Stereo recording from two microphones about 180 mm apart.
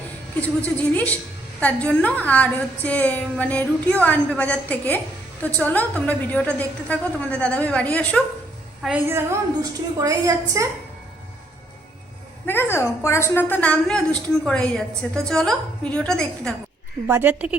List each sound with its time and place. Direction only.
0.4 s a woman's voice: 10° left (ahead or behind)
8.8 s a woman's voice: 10° right (ahead or behind)
12.5 s a woman's voice: 10° left (ahead or behind)
17.1 s a woman's voice: 10° right (ahead or behind)